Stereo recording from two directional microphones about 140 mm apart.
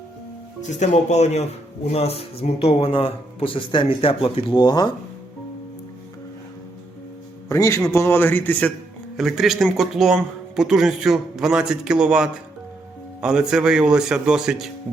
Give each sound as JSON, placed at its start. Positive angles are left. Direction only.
{"t": 0.6, "sound": "speech", "side_deg": 55}
{"t": 7.4, "sound": "a man's voice", "side_deg": 20}
{"t": 9.1, "sound": "speech", "side_deg": 0}